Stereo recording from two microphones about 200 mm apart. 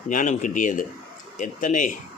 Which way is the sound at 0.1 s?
40° left (ahead or behind).